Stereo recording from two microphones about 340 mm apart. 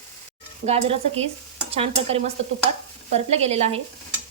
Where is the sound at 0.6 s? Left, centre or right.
Centre.